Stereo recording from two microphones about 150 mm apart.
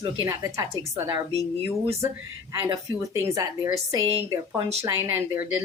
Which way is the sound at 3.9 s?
25° right (ahead or behind).